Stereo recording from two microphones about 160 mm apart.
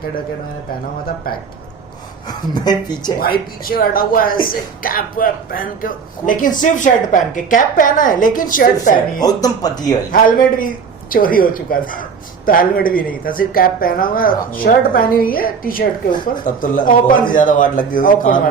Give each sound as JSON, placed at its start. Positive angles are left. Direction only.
{"t": 2.2, "sound": "speech", "side_deg": 25}
{"t": 3.2, "sound": "speech", "side_deg": 65}
{"t": 9.2, "sound": "speech", "side_deg": 25}
{"t": 10.1, "sound": "speech", "side_deg": 60}